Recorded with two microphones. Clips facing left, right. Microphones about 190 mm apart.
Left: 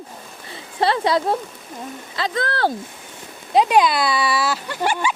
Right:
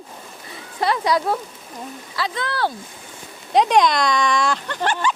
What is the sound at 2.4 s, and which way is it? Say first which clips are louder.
Speech: left 3 dB; 45° left (ahead or behind).